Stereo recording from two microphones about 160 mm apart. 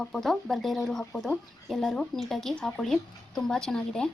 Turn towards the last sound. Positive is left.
turn(degrees=5)  # may be behind; listen again after turning